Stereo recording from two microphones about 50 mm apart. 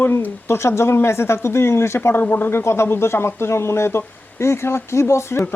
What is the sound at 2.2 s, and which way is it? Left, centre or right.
Speech, left.